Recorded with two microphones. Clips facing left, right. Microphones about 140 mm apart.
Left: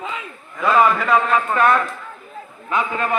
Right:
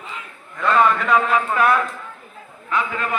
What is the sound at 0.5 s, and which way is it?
A man's voice, 5° left (ahead or behind).